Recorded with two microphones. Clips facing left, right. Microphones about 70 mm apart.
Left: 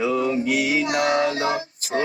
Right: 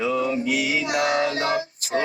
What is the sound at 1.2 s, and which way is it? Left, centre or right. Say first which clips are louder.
Female singing: left 1 dB; left.